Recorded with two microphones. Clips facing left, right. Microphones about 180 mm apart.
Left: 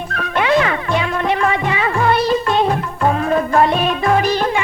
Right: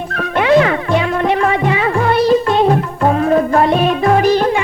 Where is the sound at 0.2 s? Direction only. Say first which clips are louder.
Right 4 dB; 45° right (ahead or behind).